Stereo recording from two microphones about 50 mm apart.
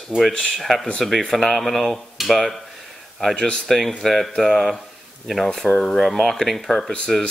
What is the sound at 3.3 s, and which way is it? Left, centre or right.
Speech, centre.